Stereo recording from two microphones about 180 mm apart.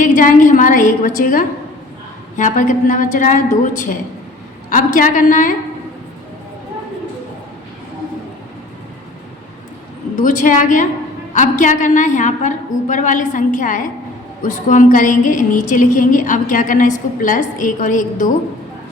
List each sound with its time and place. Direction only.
0.0 s a woman's voice: 45° left (ahead or behind)
10.2 s a woman's voice: 45° left (ahead or behind)